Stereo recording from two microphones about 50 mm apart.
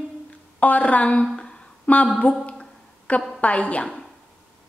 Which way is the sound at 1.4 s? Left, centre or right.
Centre.